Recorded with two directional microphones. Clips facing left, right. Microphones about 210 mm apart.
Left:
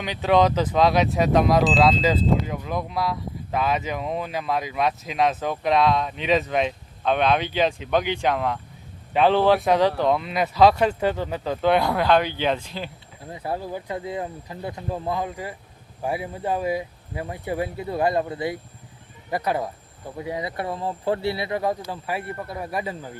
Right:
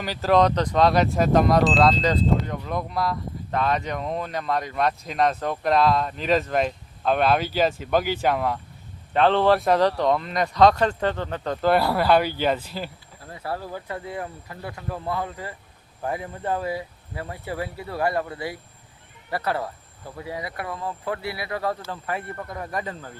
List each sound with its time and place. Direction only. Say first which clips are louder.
0.0 s speech: even; centre (ahead or behind)
9.1 s speech: left 1 dB; 5° left (ahead or behind)
13.2 s speech: left 2 dB; 20° left (ahead or behind)